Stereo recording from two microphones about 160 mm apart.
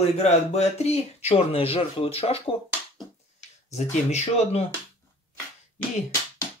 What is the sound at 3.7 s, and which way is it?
Speech, 45° left (ahead or behind).